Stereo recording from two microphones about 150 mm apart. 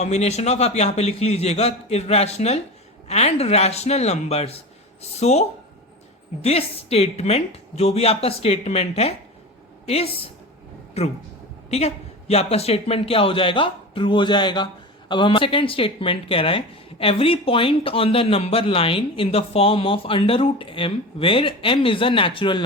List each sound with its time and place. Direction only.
0.0 s a woman's voice: 45° left (ahead or behind)